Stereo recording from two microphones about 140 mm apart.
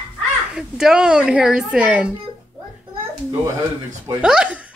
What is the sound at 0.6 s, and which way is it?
Speech, 5° right (ahead or behind).